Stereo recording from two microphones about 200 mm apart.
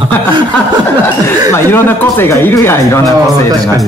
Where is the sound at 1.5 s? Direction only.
10° left (ahead or behind).